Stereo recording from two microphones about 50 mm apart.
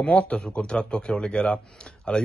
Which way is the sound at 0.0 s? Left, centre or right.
Left.